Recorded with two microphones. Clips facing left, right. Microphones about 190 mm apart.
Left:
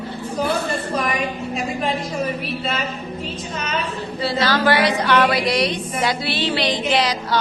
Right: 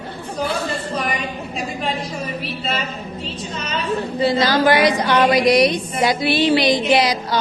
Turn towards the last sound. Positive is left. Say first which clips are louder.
# right 3 dB
turn(degrees=-10)  # may be behind; listen again after turning